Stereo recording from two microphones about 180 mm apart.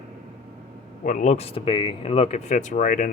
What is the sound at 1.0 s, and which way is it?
Speech, 45° left (ahead or behind).